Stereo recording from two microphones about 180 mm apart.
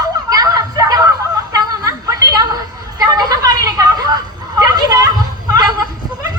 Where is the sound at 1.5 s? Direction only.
20° right (ahead or behind).